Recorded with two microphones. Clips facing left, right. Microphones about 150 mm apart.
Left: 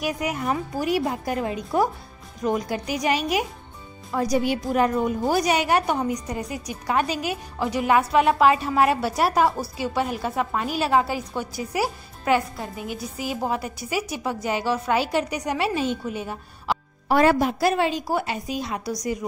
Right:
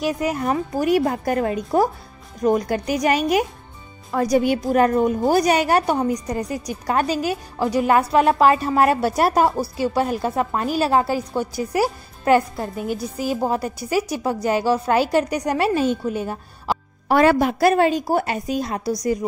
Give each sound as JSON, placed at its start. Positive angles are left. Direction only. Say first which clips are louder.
{"t": 0.0, "sound": "a woman's voice", "louder": "right 4 dB", "side_deg": -30}
{"t": 0.8, "sound": "a woman's voice", "louder": "right 5 dB", "side_deg": -50}
{"t": 17.1, "sound": "a woman's voice", "louder": "right 3 dB", "side_deg": -70}